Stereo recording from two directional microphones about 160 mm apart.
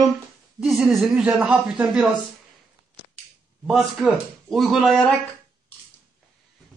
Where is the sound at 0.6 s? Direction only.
5° right (ahead or behind).